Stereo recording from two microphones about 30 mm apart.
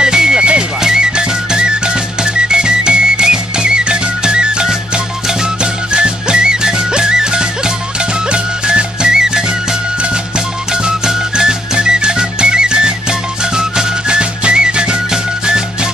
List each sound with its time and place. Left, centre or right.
0.0 s music: right
11.3 s music: right
15.0 s music: right